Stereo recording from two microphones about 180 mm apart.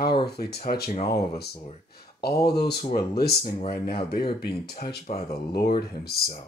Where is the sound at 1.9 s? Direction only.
60° left (ahead or behind).